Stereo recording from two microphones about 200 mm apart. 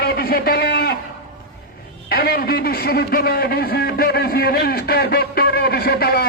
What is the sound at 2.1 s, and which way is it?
A man's voice, 50° left (ahead or behind).